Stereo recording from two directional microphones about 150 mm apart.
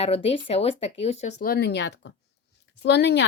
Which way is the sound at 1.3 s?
90° left.